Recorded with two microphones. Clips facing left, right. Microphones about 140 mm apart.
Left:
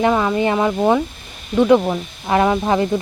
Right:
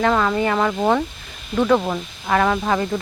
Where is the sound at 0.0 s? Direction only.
15° left (ahead or behind).